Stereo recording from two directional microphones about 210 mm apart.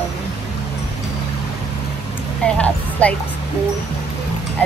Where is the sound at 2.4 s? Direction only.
5° left (ahead or behind).